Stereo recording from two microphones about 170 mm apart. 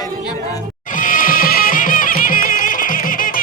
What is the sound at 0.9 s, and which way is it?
Music, 55° left (ahead or behind).